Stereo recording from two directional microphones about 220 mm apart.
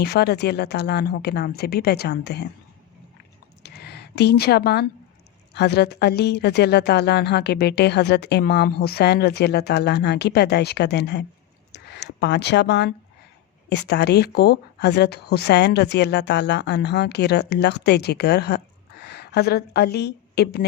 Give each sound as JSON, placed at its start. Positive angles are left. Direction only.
{"t": 0.0, "sound": "speech", "side_deg": 45}
{"t": 3.6, "sound": "a sound", "side_deg": 50}
{"t": 5.5, "sound": "a woman's voice", "side_deg": 50}